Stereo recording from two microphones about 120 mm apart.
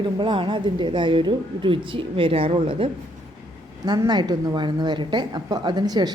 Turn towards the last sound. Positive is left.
turn(degrees=-35)  # may be behind; listen again after turning